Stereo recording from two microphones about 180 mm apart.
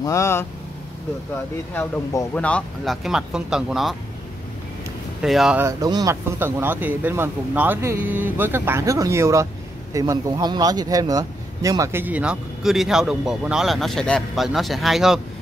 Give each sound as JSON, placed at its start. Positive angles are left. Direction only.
{"t": 0.0, "sound": "speech", "side_deg": 15}
{"t": 1.8, "sound": "a man's voice", "side_deg": 10}
{"t": 5.2, "sound": "a man's voice", "side_deg": 0}
{"t": 5.6, "sound": "a man's voice", "side_deg": -20}